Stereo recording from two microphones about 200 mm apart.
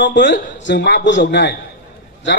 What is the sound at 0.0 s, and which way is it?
A man's voice, 65° left (ahead or behind).